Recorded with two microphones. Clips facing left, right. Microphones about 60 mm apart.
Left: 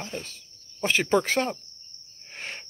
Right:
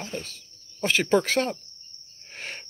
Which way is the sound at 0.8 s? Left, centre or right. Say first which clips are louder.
Right 1 dB; left.